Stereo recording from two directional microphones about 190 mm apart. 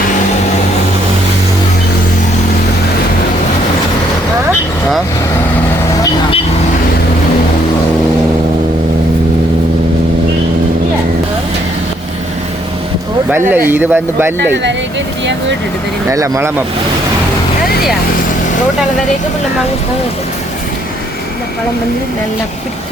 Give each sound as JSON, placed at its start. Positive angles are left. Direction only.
{"t": 13.5, "sound": "speech", "side_deg": -10}
{"t": 14.5, "sound": "speech", "side_deg": -65}
{"t": 16.0, "sound": "speech", "side_deg": -15}